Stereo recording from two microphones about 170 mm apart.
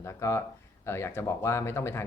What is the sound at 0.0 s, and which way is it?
Speech, 15° left (ahead or behind).